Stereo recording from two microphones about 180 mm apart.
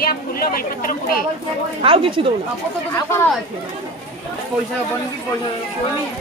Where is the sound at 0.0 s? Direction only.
55° left (ahead or behind).